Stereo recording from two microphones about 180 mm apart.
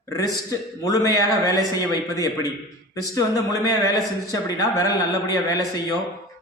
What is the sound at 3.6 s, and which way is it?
Speech, 20° left (ahead or behind).